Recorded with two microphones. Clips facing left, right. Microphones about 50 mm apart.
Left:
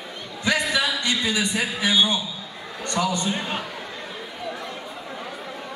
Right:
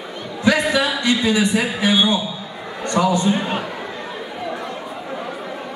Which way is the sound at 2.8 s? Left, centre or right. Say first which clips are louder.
Right 7 dB; centre.